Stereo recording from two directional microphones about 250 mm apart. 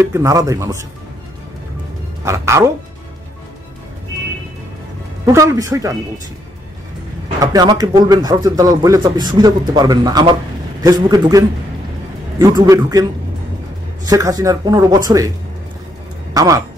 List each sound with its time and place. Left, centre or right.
0.1 s speech: centre
2.2 s speech: centre
5.2 s speech: centre
7.3 s speech: centre
14.0 s speech: centre
16.3 s speech: centre